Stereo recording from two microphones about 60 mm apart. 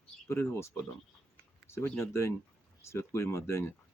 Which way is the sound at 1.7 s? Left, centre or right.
Left.